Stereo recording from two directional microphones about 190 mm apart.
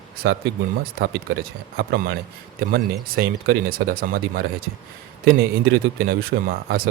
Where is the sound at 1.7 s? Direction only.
55° right (ahead or behind).